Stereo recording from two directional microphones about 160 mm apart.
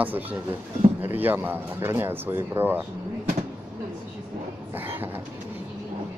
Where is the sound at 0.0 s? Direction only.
10° right (ahead or behind).